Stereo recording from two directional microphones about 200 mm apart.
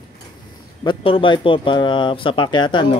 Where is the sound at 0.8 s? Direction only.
25° left (ahead or behind).